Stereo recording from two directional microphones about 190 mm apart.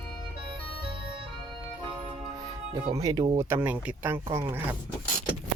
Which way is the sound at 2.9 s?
20° right (ahead or behind).